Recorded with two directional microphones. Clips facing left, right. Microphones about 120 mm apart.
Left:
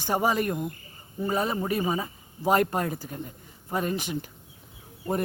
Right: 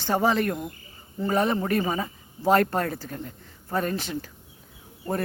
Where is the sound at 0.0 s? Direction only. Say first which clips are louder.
Right 2 dB; 15° left (ahead or behind).